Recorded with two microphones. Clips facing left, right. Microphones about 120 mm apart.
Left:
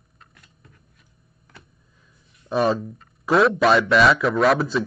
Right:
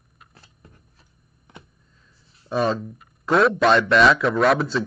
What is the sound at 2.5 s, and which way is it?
A man's voice, centre (ahead or behind).